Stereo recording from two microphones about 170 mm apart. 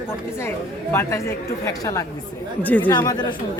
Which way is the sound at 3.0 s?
20° left (ahead or behind).